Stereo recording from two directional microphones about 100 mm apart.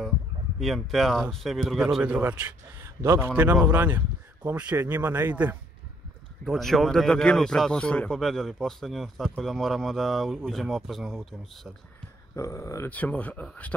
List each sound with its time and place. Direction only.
0.6 s speech: centre (ahead or behind)
2.1 s speech: 15° right (ahead or behind)
3.0 s a man's voice: 30° right (ahead or behind)
3.6 s speech: 15° right (ahead or behind)
6.4 s speech: centre (ahead or behind)
12.4 s speech: 30° left (ahead or behind)
12.9 s speech: 15° left (ahead or behind)